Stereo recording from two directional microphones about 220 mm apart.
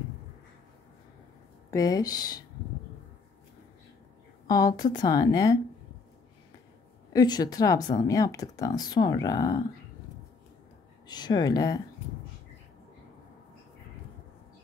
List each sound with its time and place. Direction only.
1.7 s speech: 15° left (ahead or behind)
4.5 s speech: 15° left (ahead or behind)
7.1 s speech: 20° left (ahead or behind)
11.1 s speech: 20° left (ahead or behind)